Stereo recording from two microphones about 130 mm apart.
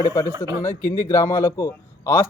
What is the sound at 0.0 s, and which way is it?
Speech, 20° left (ahead or behind).